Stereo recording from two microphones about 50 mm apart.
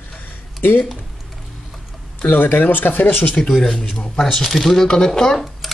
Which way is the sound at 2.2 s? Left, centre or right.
Left.